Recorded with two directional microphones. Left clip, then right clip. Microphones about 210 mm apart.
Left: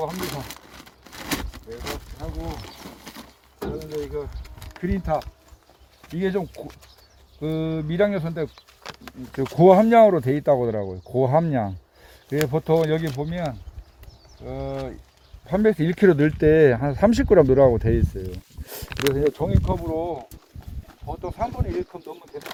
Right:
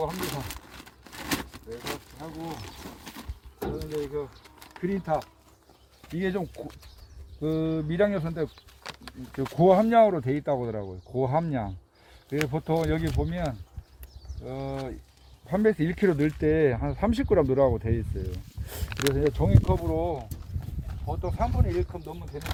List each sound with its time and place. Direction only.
0.0 s a sound: 5° left (ahead or behind)
4.8 s speech: 20° left (ahead or behind)
8.5 s speech: 10° left (ahead or behind)
9.6 s speech: 45° left (ahead or behind); by 13.6 s 20° left (ahead or behind)
14.4 s mechanisms: 10° left (ahead or behind)
15.4 s speech: 35° left (ahead or behind)
18.9 s mechanisms: 15° left (ahead or behind)
19.3 s speech: 45° left (ahead or behind)
19.8 s speech: centre (ahead or behind)